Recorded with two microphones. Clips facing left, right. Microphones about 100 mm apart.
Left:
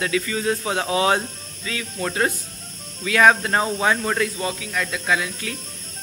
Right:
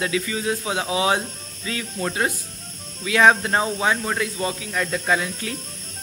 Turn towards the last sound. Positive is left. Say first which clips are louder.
# right 1 dB
turn(degrees=-30)  # may be behind; listen again after turning